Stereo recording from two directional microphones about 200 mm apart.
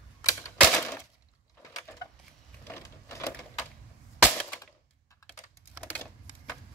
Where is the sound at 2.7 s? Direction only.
15° left (ahead or behind).